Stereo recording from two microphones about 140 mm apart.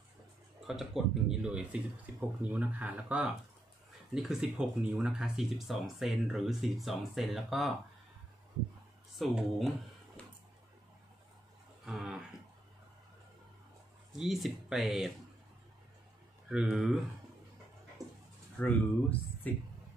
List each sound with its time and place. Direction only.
0.7 s speech: 5° right (ahead or behind)
9.1 s speech: centre (ahead or behind)
11.8 s a sound: 5° right (ahead or behind)
14.1 s speech: centre (ahead or behind)
16.7 s speech: centre (ahead or behind)
18.0 s dog: 25° right (ahead or behind)
18.6 s speech: 10° left (ahead or behind)